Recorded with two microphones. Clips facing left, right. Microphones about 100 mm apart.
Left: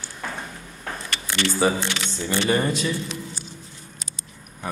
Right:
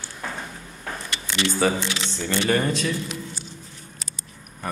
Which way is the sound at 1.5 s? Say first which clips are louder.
Left 1 dB; 5° left (ahead or behind).